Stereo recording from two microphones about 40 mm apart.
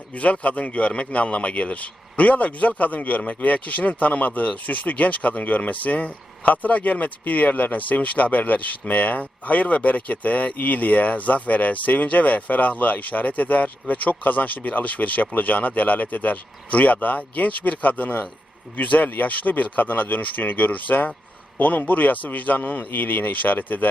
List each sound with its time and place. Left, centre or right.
0.1 s a man's voice: left